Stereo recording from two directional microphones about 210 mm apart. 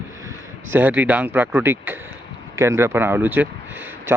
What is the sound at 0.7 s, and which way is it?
Speech, 10° right (ahead or behind).